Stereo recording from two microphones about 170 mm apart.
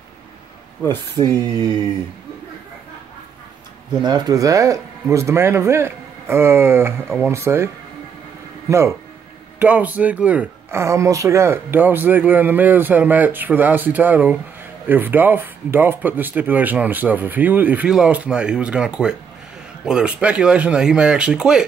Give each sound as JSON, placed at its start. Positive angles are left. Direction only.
{"t": 4.0, "sound": "speech", "side_deg": -20}